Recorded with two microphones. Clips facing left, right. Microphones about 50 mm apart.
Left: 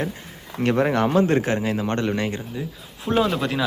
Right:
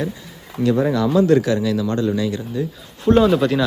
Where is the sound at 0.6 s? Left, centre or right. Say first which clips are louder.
Right 2 dB; left.